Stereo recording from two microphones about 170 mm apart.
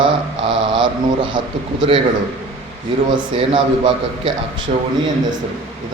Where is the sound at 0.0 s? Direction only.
30° right (ahead or behind).